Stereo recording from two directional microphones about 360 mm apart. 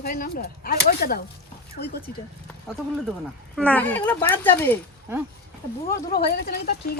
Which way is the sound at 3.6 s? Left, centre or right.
Centre.